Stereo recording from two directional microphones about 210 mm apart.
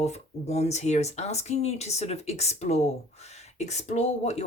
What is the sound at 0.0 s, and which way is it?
Speech, 30° left (ahead or behind).